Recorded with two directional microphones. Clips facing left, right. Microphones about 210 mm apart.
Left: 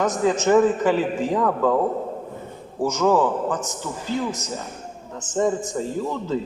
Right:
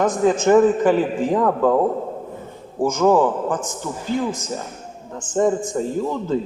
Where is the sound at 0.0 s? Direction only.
50° right (ahead or behind).